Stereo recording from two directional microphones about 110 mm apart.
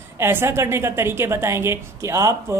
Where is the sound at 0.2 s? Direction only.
20° right (ahead or behind).